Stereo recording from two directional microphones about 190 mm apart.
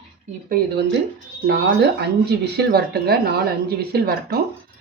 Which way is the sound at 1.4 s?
65° right (ahead or behind).